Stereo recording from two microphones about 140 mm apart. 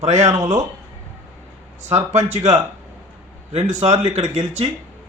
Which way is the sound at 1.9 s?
60° right (ahead or behind).